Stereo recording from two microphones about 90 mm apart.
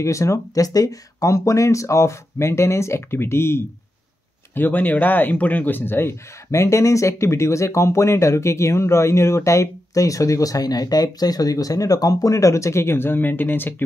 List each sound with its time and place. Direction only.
0.0 s speech: 35° left (ahead or behind)